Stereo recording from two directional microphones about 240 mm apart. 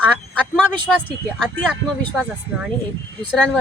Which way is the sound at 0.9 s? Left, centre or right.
Centre.